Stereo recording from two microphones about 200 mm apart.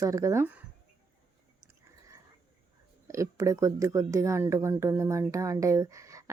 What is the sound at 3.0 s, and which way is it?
Speech, 15° right (ahead or behind).